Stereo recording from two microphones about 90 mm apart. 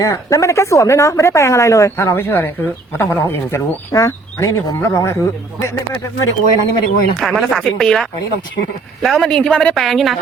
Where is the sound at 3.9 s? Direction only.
40° left (ahead or behind).